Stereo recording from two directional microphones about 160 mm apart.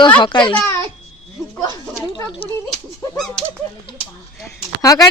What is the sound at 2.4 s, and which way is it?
Speech, 35° left (ahead or behind).